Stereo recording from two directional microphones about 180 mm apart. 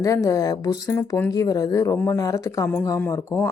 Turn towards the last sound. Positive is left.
turn(degrees=15)  # may be behind; listen again after turning